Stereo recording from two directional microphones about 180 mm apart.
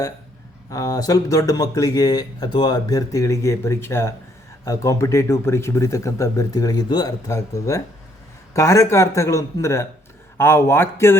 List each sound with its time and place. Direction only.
0.7 s speech: 20° left (ahead or behind)